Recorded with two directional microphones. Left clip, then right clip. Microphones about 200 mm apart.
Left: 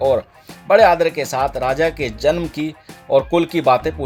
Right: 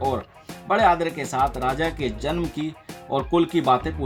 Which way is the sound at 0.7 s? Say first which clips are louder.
Left 7 dB; 45° left (ahead or behind).